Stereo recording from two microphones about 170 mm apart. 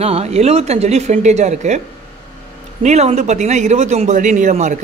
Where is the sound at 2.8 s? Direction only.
40° right (ahead or behind).